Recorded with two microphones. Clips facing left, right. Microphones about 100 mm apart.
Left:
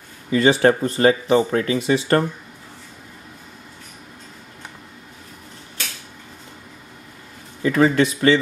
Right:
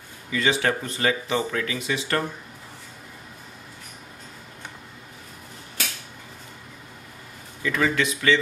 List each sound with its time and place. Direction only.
0.3 s speech: 35° left (ahead or behind)
7.6 s speech: 35° left (ahead or behind)